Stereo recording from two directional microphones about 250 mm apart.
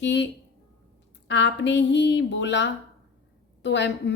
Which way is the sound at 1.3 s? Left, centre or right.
Left.